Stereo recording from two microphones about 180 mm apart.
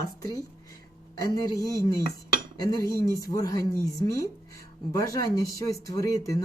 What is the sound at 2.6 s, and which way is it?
Speech, 20° left (ahead or behind).